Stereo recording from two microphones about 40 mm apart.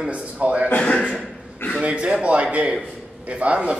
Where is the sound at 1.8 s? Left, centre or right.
Right.